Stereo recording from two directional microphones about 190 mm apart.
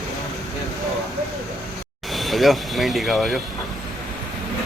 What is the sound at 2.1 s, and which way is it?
Speech, centre (ahead or behind).